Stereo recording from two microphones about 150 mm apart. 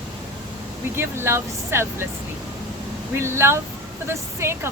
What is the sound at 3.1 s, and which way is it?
Speech, 15° right (ahead or behind).